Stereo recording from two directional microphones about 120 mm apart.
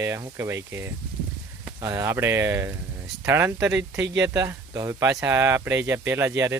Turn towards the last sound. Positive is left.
turn(degrees=-20)  # may be behind; listen again after turning